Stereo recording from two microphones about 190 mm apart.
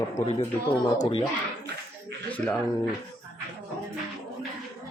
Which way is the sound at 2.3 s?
10° left (ahead or behind).